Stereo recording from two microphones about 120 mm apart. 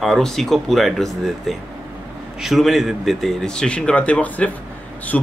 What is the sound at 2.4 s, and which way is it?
A man's voice, centre (ahead or behind).